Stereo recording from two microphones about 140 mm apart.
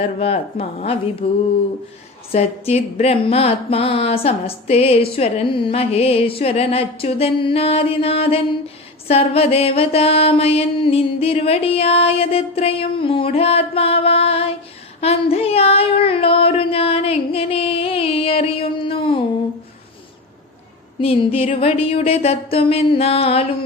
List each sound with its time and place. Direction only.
0.2 s mantra: 45° left (ahead or behind)
1.2 s a sound: 40° left (ahead or behind)
2.3 s mantra: 45° left (ahead or behind)
15.0 s female singing: 45° left (ahead or behind)
21.0 s mantra: 40° left (ahead or behind)